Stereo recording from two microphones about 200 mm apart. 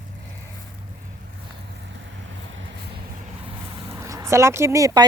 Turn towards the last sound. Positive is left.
turn(degrees=-15)  # may be behind; listen again after turning